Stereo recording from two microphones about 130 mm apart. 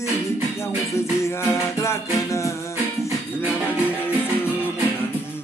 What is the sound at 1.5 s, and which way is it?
Music, 20° left (ahead or behind).